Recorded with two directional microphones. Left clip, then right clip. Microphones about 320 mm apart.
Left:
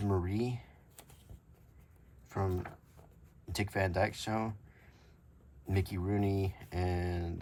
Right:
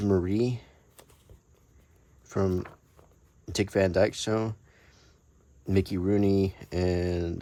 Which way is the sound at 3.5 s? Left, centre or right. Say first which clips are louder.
Right 9 dB; right.